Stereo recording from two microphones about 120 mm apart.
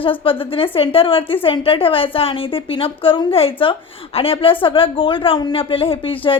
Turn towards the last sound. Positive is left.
turn(degrees=50)  # may be behind; listen again after turning